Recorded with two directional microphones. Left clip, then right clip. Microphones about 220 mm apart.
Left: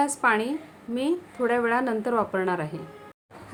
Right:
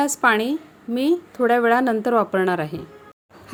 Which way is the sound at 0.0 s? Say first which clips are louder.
Right 4 dB; 30° right (ahead or behind).